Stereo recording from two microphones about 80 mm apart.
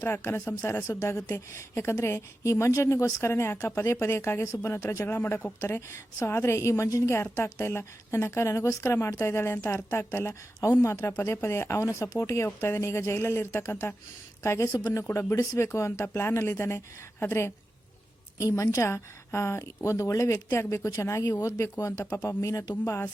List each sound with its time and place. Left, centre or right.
0.0 s a woman's voice: left
14.7 s speech: left
15.0 s a woman's voice: left